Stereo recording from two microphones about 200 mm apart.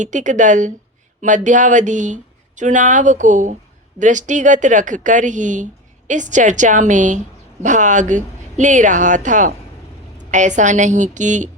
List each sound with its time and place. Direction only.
0.0 s speech: 40° right (ahead or behind)